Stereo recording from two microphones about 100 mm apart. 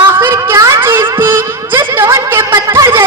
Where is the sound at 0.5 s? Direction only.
30° right (ahead or behind).